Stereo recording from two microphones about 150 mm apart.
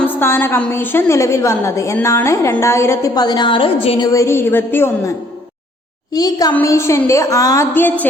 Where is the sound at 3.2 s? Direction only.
30° left (ahead or behind).